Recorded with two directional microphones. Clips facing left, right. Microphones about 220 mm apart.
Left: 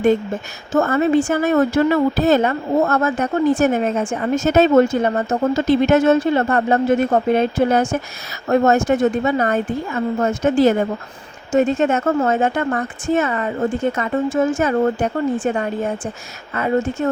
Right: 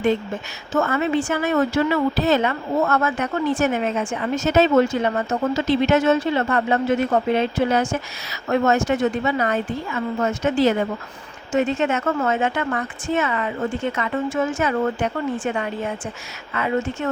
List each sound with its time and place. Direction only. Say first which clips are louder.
0.7 s a woman's voice: left 5 dB; 45° left (ahead or behind)
5.5 s a woman's voice: left 4 dB; 50° left (ahead or behind)